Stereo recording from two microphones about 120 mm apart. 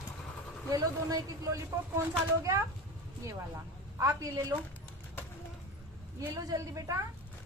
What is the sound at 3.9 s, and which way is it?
Speech, 25° right (ahead or behind).